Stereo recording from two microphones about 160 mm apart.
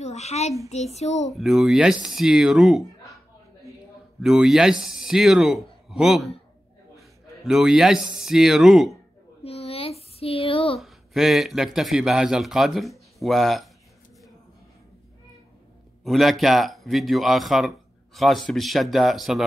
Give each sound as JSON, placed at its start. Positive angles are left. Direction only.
{"t": 0.0, "sound": "a child's voice", "side_deg": 45}
{"t": 1.3, "sound": "speech", "side_deg": 0}
{"t": 4.2, "sound": "speech", "side_deg": 0}
{"t": 9.4, "sound": "a sound", "side_deg": 40}
{"t": 10.8, "sound": "speech", "side_deg": 0}
{"t": 16.0, "sound": "speech", "side_deg": 0}